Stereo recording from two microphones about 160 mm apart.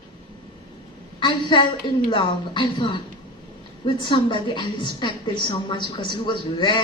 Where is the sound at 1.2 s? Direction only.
30° left (ahead or behind).